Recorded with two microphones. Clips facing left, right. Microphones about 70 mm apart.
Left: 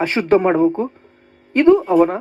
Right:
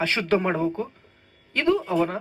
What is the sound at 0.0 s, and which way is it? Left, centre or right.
Speech, left.